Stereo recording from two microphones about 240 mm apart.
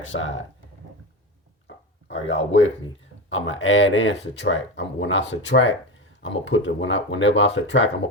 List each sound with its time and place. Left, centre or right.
0.0 s speech: left
1.6 s a sound: left
3.2 s speech: left